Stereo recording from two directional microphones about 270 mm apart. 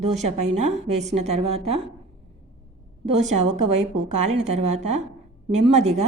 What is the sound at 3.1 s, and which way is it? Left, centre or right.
A woman's voice, right.